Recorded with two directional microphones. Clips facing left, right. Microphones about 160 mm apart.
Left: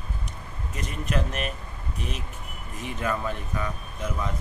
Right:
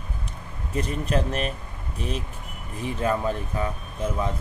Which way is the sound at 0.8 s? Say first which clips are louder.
Right 4 dB; 30° right (ahead or behind).